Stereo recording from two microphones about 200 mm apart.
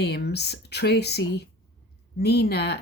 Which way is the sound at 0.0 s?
55° left (ahead or behind).